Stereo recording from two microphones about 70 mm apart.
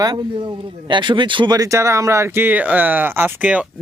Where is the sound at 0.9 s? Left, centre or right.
Right.